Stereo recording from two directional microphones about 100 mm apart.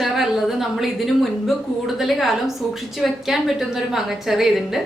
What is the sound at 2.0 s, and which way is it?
A woman's voice, centre (ahead or behind).